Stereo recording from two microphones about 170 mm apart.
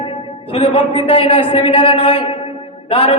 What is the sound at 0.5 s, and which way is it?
A man's voice, 30° left (ahead or behind).